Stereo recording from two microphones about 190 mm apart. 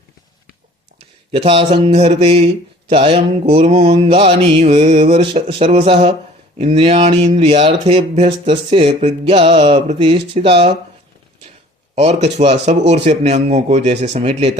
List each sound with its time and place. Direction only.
1.3 s speech: 30° right (ahead or behind)
11.9 s speech: 35° right (ahead or behind)